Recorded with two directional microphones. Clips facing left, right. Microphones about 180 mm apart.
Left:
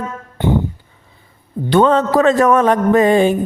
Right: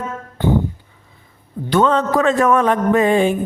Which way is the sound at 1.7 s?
35° left (ahead or behind).